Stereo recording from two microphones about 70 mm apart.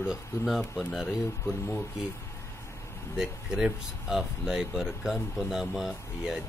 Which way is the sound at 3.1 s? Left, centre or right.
Centre.